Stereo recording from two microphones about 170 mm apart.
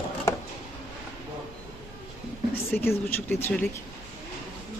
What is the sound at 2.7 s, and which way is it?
Speech, 10° left (ahead or behind).